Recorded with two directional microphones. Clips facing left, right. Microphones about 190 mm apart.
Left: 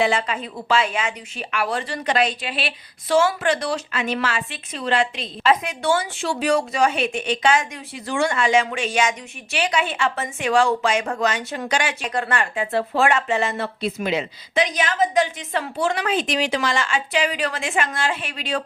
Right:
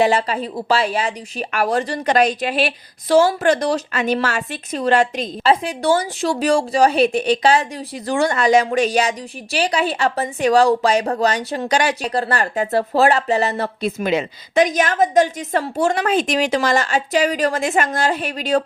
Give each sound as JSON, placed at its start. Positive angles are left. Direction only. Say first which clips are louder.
{"t": 0.0, "sound": "speech", "louder": "right 4 dB", "side_deg": -35}